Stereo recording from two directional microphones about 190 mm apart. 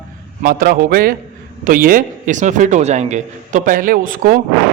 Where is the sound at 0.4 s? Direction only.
50° right (ahead or behind).